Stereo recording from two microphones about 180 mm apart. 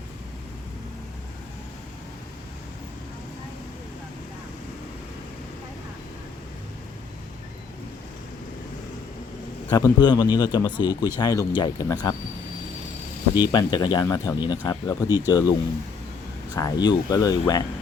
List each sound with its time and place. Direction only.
9.6 s a man's voice: 20° left (ahead or behind)
13.4 s a man's voice: 25° left (ahead or behind)
16.6 s a man's voice: 20° left (ahead or behind)